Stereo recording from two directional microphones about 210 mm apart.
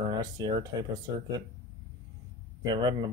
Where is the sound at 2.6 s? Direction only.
20° right (ahead or behind).